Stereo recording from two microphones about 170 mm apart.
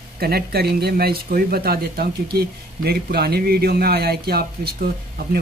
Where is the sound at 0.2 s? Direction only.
65° right (ahead or behind).